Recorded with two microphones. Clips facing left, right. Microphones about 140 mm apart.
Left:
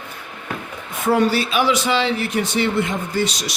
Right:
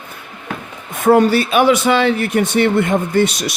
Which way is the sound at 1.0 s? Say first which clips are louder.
Right 6 dB; 55° right (ahead or behind).